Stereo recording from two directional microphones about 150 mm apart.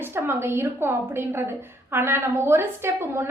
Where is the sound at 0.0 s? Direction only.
15° right (ahead or behind).